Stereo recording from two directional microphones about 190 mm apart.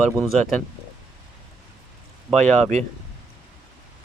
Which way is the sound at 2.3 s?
35° right (ahead or behind).